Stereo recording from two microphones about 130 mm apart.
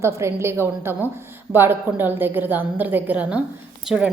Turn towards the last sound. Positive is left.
turn(degrees=-5)  # may be behind; listen again after turning